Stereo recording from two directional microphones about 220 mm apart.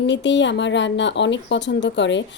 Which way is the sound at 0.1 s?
55° left (ahead or behind).